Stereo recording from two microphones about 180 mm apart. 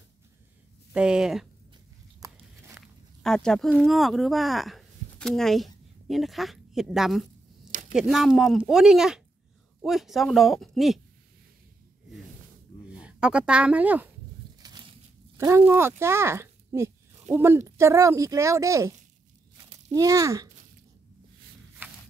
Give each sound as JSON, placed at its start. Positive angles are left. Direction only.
{"t": 0.9, "sound": "speech", "side_deg": -5}
{"t": 2.1, "sound": "biting", "side_deg": -15}
{"t": 2.7, "sound": "speech", "side_deg": 5}
{"t": 12.9, "sound": "speech", "side_deg": -5}
{"t": 14.6, "sound": "a sound", "side_deg": -25}
{"t": 15.3, "sound": "speech", "side_deg": -15}
{"t": 21.8, "sound": "walk", "side_deg": -10}